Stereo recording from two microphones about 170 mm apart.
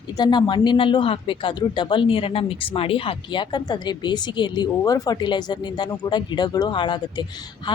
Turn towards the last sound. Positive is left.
turn(degrees=30)  # may be behind; listen again after turning